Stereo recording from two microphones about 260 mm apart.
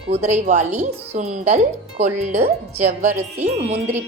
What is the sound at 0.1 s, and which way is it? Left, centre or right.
Speech, right.